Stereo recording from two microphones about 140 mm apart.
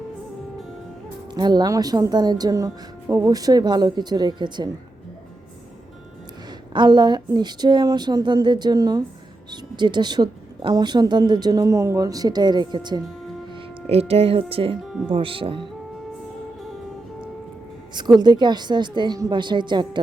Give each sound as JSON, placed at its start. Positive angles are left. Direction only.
{"t": 1.3, "sound": "speech", "side_deg": -30}
{"t": 6.7, "sound": "a woman's voice", "side_deg": -30}
{"t": 13.5, "sound": "speech", "side_deg": -40}
{"t": 14.8, "sound": "speech", "side_deg": -5}
{"t": 15.1, "sound": "a woman's voice", "side_deg": -40}
{"t": 17.9, "sound": "a woman's voice", "side_deg": -30}